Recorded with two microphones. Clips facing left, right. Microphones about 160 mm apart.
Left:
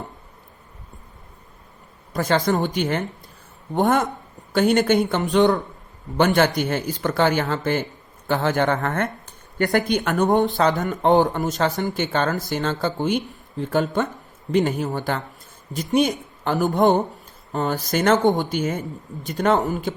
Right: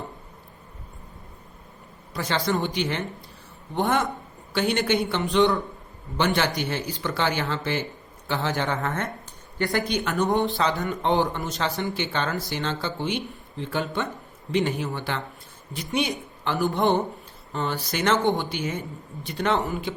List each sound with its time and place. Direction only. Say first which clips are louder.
2.1 s speech: left 5 dB; 45° left (ahead or behind)